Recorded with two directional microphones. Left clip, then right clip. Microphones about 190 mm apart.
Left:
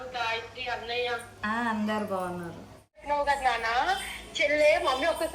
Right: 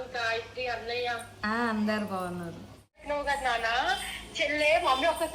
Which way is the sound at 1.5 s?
5° left (ahead or behind).